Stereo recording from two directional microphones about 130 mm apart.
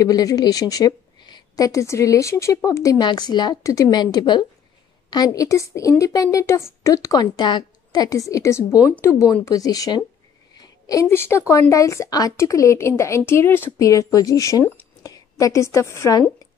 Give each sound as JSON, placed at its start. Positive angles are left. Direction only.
{"t": 0.0, "sound": "a woman's voice", "side_deg": 30}